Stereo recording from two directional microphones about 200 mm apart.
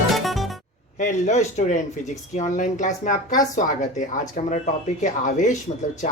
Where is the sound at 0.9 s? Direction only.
40° left (ahead or behind).